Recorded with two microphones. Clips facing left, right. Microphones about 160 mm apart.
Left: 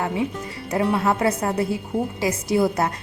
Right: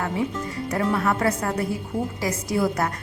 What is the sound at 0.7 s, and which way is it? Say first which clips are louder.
A woman's voice: left 3 dB; 20° left (ahead or behind).